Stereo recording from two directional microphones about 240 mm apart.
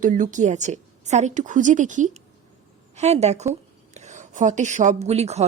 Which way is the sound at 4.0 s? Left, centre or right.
Right.